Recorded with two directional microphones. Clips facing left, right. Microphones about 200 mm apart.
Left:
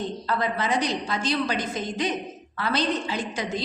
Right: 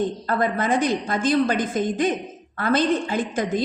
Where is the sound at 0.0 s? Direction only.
50° right (ahead or behind).